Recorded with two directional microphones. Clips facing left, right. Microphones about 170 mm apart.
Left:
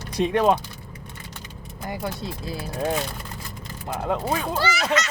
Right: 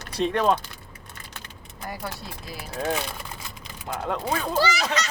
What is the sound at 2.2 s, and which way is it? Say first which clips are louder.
Speech: left 7 dB; 25° left (ahead or behind).